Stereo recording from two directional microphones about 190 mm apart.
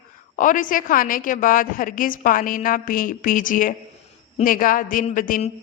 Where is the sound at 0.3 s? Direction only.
45° left (ahead or behind).